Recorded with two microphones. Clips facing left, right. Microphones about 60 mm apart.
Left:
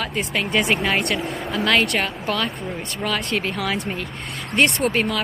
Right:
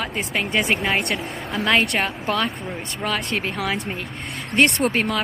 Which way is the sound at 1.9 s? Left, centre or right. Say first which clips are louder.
Right 1 dB; right.